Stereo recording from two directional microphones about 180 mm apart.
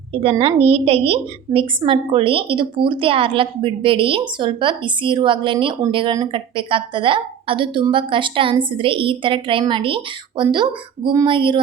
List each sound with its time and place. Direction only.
0.1 s a woman's voice: 30° right (ahead or behind)